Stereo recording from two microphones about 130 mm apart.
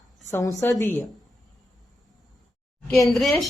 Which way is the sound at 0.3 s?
25° left (ahead or behind).